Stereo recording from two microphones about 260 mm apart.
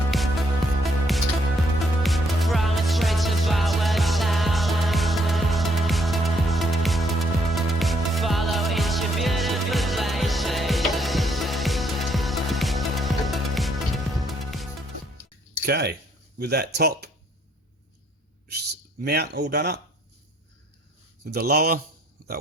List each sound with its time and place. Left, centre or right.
0.1 s music: centre
15.6 s a sound: right
16.4 s speech: right
18.4 s speech: right
21.2 s speech: right